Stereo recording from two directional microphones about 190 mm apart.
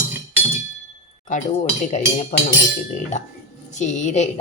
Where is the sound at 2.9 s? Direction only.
40° left (ahead or behind).